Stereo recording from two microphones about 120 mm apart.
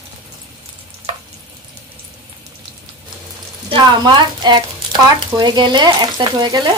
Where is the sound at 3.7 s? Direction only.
40° right (ahead or behind).